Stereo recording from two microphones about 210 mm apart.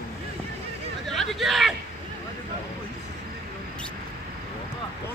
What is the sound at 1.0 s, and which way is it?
Speech, centre (ahead or behind).